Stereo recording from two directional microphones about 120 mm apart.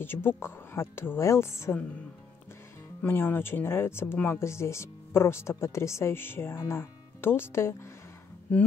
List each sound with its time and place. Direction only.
0.0 s speech: 20° left (ahead or behind)
3.0 s speech: 15° left (ahead or behind)
8.5 s speech: 10° left (ahead or behind)